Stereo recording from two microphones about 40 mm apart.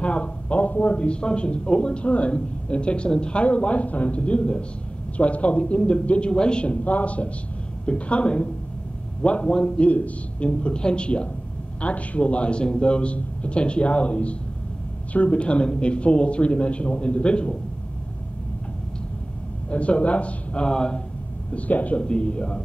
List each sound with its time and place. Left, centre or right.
0.0 s a man's voice: left
9.8 s a man's voice: left
19.7 s a man's voice: left
20.6 s a man's voice: left
21.5 s a man's voice: left
22.0 s a man's voice: left